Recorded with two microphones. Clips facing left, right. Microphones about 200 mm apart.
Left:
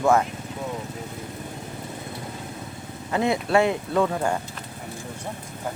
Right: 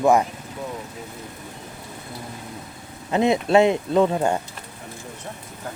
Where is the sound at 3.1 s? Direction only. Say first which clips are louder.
Right 4 dB; 20° right (ahead or behind).